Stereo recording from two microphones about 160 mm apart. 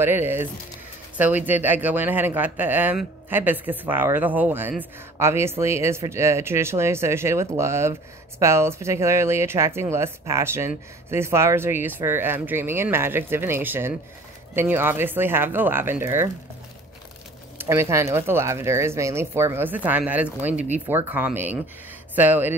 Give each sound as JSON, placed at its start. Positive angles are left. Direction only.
{"t": 0.0, "sound": "a man's voice", "side_deg": -15}
{"t": 17.6, "sound": "a man's voice", "side_deg": -15}